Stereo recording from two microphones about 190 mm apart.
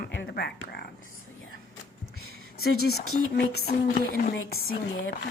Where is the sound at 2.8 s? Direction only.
55° left (ahead or behind).